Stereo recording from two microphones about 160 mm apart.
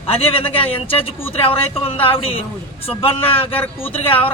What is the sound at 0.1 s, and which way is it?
A man's voice, 35° left (ahead or behind).